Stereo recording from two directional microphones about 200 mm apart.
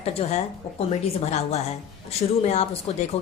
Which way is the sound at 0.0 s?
30° left (ahead or behind).